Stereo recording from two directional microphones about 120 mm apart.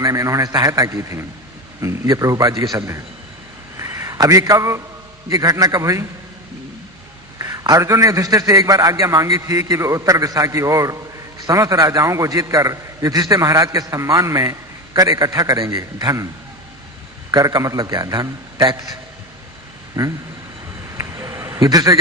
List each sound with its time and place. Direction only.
0.0 s a man's voice: 30° right (ahead or behind)
3.8 s a sound: 25° right (ahead or behind)
5.3 s a man's voice: 30° right (ahead or behind)
7.3 s a man's voice: 30° right (ahead or behind)
17.3 s a man's voice: 30° right (ahead or behind)
20.0 s a man's voice: 20° right (ahead or behind)
21.0 s a sound: 25° right (ahead or behind)